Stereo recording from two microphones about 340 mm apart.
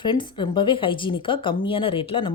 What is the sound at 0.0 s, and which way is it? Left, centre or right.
A woman's voice, centre.